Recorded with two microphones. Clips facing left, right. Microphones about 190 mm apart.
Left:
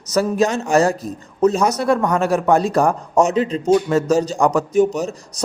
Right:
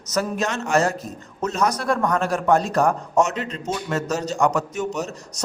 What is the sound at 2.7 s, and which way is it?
A man's voice, 35° left (ahead or behind).